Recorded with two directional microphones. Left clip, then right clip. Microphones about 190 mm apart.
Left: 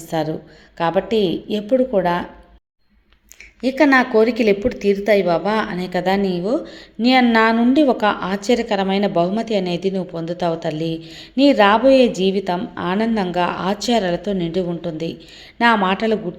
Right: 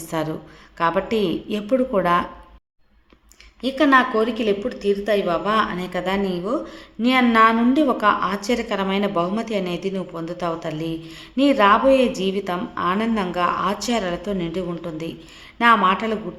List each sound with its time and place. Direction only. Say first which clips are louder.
0.0 s a woman's voice: left 3 dB; 10° left (ahead or behind)
3.6 s a woman's voice: left 2 dB; 20° left (ahead or behind)